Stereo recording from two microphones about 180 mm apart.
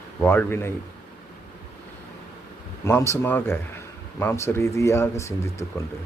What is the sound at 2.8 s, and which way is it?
Speech, 15° left (ahead or behind).